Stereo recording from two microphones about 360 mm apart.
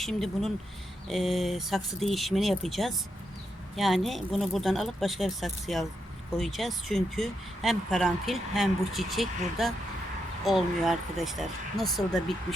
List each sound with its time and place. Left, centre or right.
0.0 s speech: centre